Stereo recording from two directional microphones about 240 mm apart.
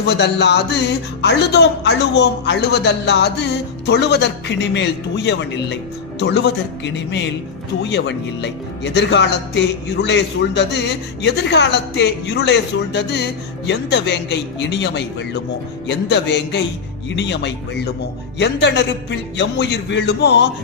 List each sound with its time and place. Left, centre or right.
0.0 s a man's voice: left